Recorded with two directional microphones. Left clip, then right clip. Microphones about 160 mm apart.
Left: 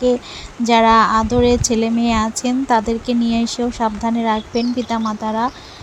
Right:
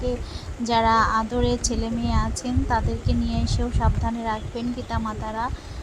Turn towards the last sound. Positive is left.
turn(degrees=40)  # may be behind; listen again after turning